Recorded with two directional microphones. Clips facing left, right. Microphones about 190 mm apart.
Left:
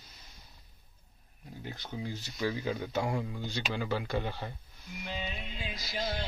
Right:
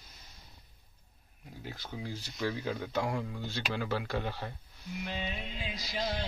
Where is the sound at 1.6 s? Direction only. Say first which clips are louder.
Left 2 dB; centre (ahead or behind).